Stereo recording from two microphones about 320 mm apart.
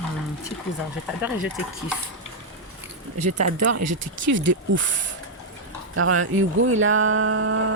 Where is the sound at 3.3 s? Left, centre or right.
Right.